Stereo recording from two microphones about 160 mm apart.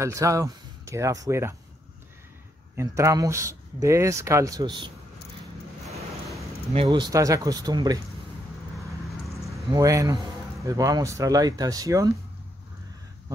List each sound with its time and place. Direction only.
0.0 s speech: 20° right (ahead or behind)
2.7 s speech: 20° right (ahead or behind)
6.7 s speech: 35° right (ahead or behind)
9.7 s speech: 20° right (ahead or behind)